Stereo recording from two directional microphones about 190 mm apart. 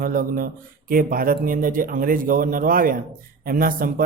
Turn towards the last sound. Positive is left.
turn(degrees=-50)  # may be behind; listen again after turning